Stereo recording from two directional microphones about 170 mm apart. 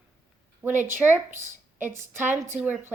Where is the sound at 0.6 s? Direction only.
10° right (ahead or behind).